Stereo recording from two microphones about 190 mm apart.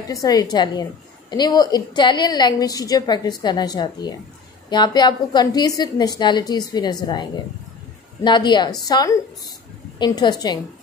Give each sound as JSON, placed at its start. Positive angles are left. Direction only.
{"t": 0.1, "sound": "a woman's voice", "side_deg": 20}